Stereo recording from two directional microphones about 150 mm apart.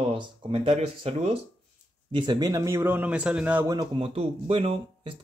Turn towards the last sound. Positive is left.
turn(degrees=-40)  # may be behind; listen again after turning